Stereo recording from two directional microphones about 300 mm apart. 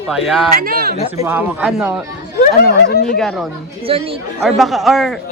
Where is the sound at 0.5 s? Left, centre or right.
Right.